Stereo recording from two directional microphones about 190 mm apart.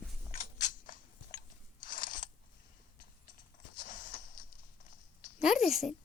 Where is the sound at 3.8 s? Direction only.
45° left (ahead or behind).